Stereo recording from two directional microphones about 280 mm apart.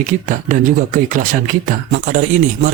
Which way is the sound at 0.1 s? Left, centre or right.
Right.